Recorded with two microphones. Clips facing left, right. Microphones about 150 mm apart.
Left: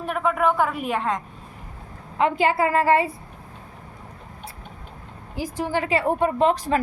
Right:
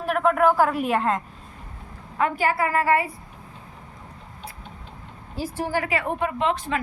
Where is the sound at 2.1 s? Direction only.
20° left (ahead or behind).